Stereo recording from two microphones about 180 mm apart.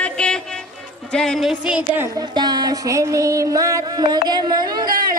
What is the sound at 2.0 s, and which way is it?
Music, 20° right (ahead or behind).